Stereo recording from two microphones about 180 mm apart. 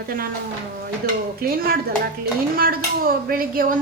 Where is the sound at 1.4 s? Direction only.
55° right (ahead or behind).